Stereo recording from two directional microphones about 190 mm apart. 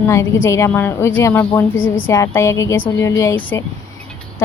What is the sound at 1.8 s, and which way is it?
Speech, 90° left.